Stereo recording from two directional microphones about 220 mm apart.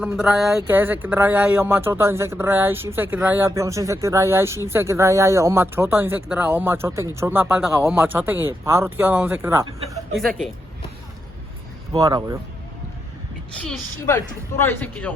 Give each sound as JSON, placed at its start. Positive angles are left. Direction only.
{"t": 0.0, "sound": "speech", "side_deg": -5}
{"t": 10.2, "sound": "speech", "side_deg": 0}
{"t": 11.9, "sound": "speech", "side_deg": -15}
{"t": 14.6, "sound": "speech", "side_deg": 10}